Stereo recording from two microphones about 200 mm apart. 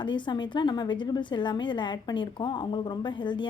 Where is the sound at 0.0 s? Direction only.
25° left (ahead or behind).